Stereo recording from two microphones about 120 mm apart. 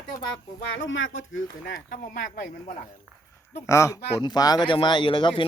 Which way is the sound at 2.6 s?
80° left.